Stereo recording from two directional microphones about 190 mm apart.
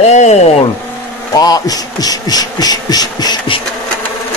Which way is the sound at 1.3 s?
20° left (ahead or behind).